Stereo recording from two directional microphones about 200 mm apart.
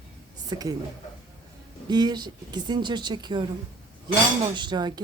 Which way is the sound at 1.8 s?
20° right (ahead or behind).